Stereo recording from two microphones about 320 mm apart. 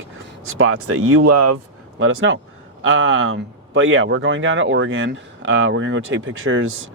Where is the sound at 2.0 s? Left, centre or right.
Right.